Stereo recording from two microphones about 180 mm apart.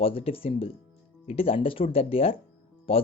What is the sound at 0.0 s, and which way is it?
Speech, 30° left (ahead or behind).